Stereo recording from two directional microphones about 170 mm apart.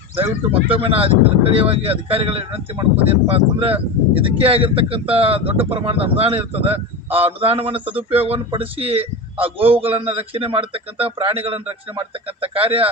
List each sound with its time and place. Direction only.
0.5 s speech: 35° right (ahead or behind)
2.9 s speech: 10° right (ahead or behind)
3.3 s speech: 35° right (ahead or behind)